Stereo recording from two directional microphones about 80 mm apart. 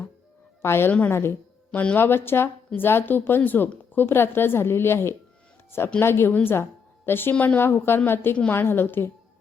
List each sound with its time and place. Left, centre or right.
0.6 s a woman's voice: left